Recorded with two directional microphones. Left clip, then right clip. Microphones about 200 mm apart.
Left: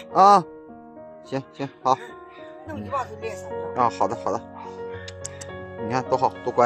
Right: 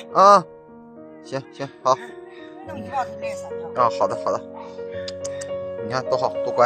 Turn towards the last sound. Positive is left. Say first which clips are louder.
# right 1 dB
turn(degrees=30)  # may be behind; listen again after turning